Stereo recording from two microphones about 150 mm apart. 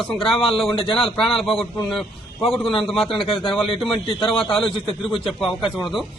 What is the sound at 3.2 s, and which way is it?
Speech, 35° left (ahead or behind).